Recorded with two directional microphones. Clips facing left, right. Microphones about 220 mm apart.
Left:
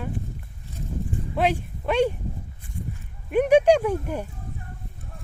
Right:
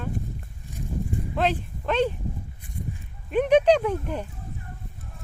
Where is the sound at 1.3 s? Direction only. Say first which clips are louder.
Left 2 dB; 10° left (ahead or behind).